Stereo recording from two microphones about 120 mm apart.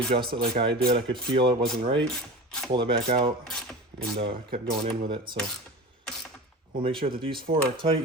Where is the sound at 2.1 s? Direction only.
5° left (ahead or behind).